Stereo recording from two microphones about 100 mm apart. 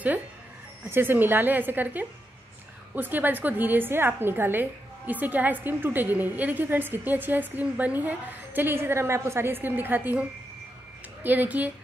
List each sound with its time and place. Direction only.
0.8 s a woman's voice: 20° right (ahead or behind)
11.2 s speech: 15° right (ahead or behind)